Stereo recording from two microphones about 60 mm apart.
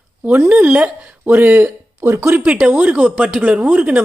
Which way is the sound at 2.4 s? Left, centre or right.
Centre.